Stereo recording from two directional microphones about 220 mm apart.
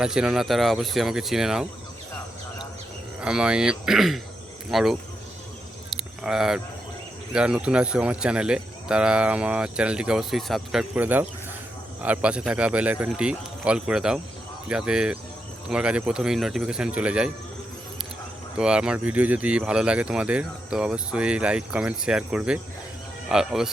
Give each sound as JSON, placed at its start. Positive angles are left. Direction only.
{"t": 0.0, "sound": "speech", "side_deg": -5}
{"t": 3.2, "sound": "speech", "side_deg": -5}
{"t": 5.9, "sound": "a sound", "side_deg": 0}
{"t": 7.3, "sound": "speech", "side_deg": -5}
{"t": 18.5, "sound": "speech", "side_deg": -5}